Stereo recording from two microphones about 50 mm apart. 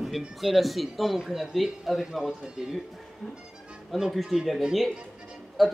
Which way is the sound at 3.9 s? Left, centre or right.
Centre.